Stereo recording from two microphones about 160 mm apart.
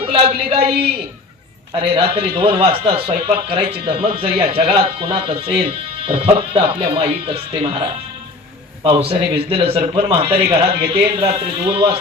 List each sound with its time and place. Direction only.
0.0 s a man's voice: 35° right (ahead or behind)
2.0 s a man's voice: 35° right (ahead or behind)